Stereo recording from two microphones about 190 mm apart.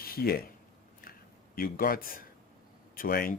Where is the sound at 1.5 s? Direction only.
50° left (ahead or behind).